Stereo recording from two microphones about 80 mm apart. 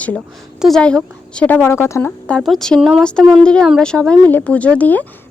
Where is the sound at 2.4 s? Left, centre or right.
Centre.